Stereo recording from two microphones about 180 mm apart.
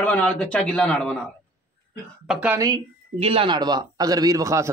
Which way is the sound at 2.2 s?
10° right (ahead or behind).